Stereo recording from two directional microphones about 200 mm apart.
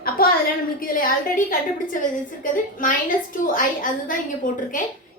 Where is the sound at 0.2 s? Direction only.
45° left (ahead or behind).